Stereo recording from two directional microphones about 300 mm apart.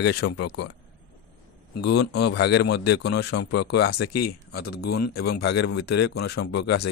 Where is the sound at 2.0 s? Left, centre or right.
Left.